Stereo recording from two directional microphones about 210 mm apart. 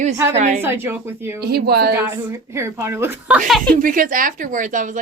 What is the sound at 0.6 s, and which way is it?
Speech, 10° right (ahead or behind).